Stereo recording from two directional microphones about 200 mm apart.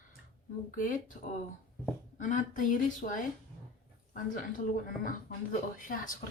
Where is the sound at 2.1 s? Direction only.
40° left (ahead or behind).